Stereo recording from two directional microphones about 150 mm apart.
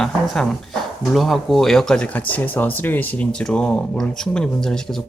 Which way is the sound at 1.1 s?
Centre (ahead or behind).